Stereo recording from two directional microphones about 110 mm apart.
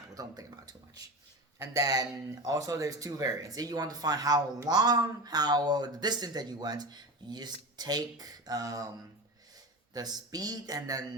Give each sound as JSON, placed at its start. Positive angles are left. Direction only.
{"t": 0.1, "sound": "a sound", "side_deg": -35}
{"t": 1.5, "sound": "speech", "side_deg": -35}
{"t": 9.9, "sound": "speech", "side_deg": -35}